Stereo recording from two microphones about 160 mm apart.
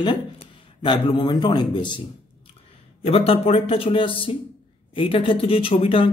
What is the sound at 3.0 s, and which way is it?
Speech, 40° left (ahead or behind).